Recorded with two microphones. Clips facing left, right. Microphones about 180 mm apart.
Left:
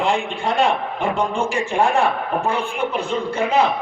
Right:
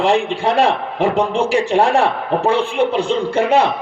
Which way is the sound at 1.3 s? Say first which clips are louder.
Right 5 dB; 75° right (ahead or behind).